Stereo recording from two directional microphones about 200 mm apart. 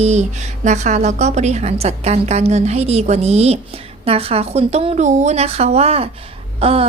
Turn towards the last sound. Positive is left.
turn(degrees=-30)  # may be behind; listen again after turning